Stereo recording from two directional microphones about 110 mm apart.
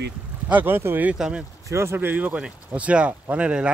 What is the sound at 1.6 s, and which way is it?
Speech, 25° right (ahead or behind).